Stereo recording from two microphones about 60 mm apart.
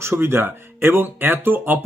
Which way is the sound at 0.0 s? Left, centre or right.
Right.